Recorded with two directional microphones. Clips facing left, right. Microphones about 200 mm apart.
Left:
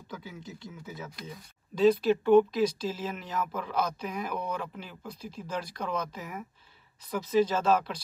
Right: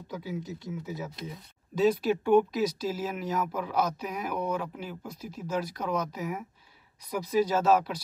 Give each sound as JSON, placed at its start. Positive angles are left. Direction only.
{"t": 0.1, "sound": "speech", "side_deg": -20}
{"t": 1.8, "sound": "speech", "side_deg": -10}